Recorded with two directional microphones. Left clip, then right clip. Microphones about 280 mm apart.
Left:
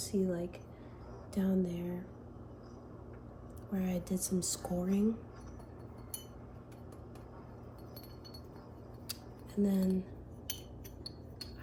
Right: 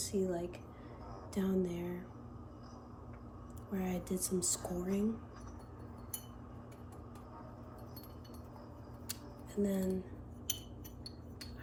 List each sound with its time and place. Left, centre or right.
0.0 s a woman's voice: centre
3.7 s a woman's voice: centre
9.6 s speech: centre